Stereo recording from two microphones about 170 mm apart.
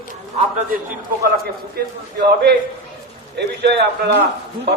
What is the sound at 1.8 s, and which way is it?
Speech, 70° right (ahead or behind).